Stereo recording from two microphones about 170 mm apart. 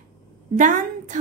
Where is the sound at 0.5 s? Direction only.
50° right (ahead or behind).